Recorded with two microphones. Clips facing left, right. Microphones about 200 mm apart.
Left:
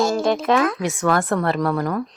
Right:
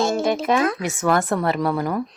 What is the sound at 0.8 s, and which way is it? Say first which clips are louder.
Speech: even; 5° right (ahead or behind).